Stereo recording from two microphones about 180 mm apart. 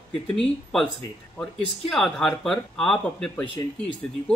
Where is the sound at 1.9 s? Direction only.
Centre (ahead or behind).